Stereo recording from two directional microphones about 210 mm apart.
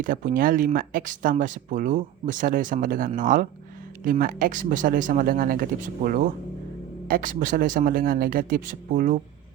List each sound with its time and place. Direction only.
0.0 s speech: 40° right (ahead or behind)